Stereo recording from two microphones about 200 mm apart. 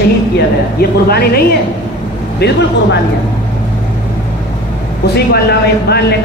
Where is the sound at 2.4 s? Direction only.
55° left (ahead or behind).